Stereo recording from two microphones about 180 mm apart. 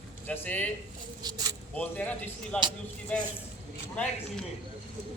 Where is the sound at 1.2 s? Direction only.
20° right (ahead or behind).